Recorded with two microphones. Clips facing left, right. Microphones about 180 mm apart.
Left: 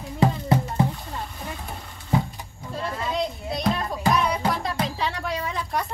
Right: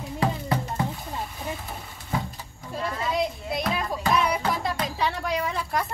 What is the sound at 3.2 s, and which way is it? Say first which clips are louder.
Children playing: even; 5° right (ahead or behind).